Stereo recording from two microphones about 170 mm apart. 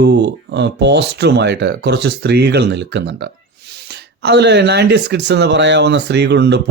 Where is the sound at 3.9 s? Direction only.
80° right.